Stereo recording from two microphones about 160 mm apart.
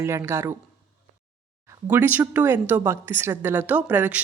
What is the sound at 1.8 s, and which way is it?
A woman's voice, 10° right (ahead or behind).